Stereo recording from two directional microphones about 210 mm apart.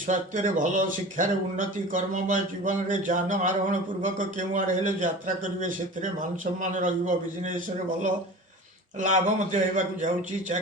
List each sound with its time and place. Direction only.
0.1 s speech: 40° right (ahead or behind)
9.0 s speech: 35° right (ahead or behind)